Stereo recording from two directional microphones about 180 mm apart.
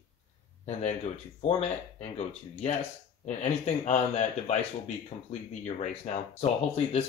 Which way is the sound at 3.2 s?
40° left (ahead or behind).